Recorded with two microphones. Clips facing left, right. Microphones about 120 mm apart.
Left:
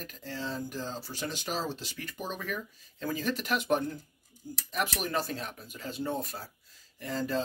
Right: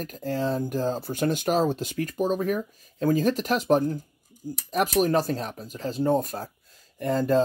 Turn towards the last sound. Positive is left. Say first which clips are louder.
# right 10 dB
turn(degrees=-50)  # may be behind; listen again after turning